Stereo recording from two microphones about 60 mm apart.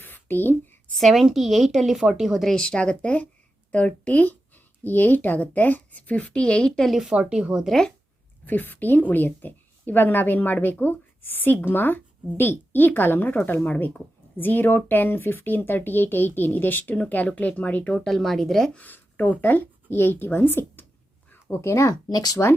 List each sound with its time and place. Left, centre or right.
0.0 s a sound: left
0.9 s a woman's voice: centre
2.5 s speech: centre
7.1 s speech: centre
7.7 s speech: centre
8.4 s a woman's voice: left
17.9 s speech: centre
18.7 s a woman's voice: left
21.5 s speech: left
21.8 s speech: left